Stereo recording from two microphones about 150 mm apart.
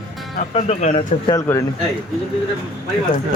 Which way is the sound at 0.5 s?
45° left (ahead or behind).